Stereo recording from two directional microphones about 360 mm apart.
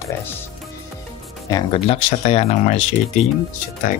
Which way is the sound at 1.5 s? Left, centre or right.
Centre.